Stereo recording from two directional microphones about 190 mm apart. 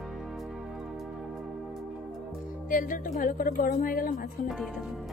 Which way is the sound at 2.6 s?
45° left (ahead or behind).